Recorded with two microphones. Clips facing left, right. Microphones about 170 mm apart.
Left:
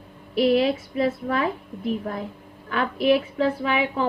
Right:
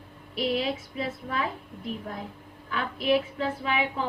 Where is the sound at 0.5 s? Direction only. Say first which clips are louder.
Left 8 dB; 65° left (ahead or behind).